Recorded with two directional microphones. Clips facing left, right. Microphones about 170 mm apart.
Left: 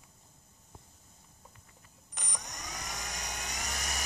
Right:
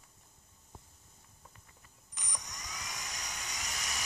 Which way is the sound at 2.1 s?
60° left (ahead or behind).